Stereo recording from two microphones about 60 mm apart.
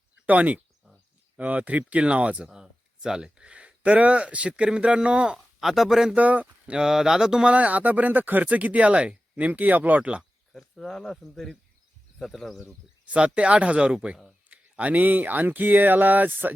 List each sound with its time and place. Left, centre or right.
0.3 s speech: right
2.5 s speech: centre
5.5 s speech: centre
6.1 s speech: right
6.7 s speech: centre
10.5 s speech: centre
13.1 s speech: centre